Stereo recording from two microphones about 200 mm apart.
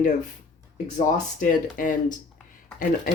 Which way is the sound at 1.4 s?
40° left (ahead or behind).